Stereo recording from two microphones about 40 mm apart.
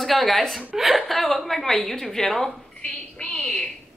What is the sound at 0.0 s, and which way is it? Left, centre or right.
Speech, centre.